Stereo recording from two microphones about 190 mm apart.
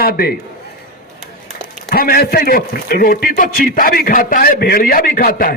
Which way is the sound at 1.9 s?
50° left (ahead or behind).